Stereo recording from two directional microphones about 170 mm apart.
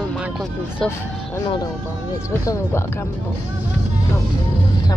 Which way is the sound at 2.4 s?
15° left (ahead or behind).